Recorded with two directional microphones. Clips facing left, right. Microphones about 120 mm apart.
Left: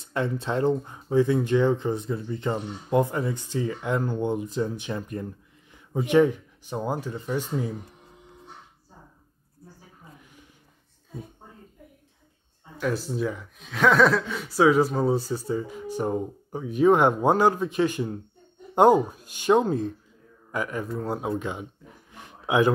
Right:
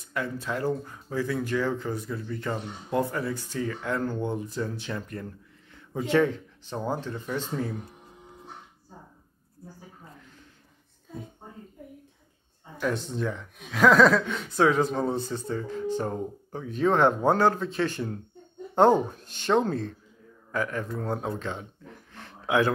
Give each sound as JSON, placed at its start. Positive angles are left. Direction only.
{"t": 0.0, "sound": "speech", "side_deg": 25}
{"t": 12.8, "sound": "speech", "side_deg": 5}